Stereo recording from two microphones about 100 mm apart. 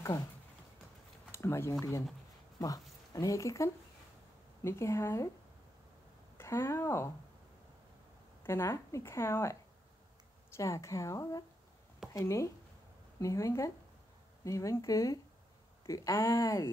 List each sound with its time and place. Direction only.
1.3 s a woman's voice: 25° left (ahead or behind)
6.3 s speech: 25° left (ahead or behind)
8.5 s a woman's voice: 30° left (ahead or behind)